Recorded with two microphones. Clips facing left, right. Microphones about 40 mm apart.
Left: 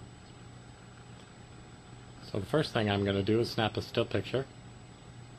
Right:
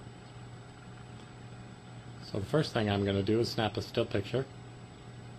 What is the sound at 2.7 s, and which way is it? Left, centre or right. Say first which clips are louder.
Speech: left 1 dB; centre.